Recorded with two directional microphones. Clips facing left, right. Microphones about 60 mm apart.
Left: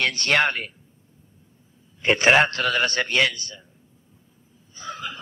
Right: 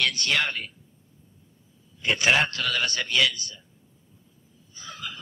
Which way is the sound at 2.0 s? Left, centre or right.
Left.